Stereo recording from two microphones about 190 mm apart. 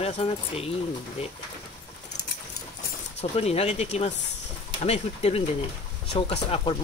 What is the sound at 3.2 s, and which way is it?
Speech, 35° left (ahead or behind).